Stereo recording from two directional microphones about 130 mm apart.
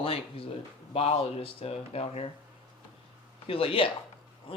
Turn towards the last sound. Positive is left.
turn(degrees=45)  # may be behind; listen again after turning